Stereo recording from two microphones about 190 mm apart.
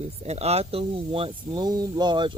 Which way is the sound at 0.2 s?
35° right (ahead or behind).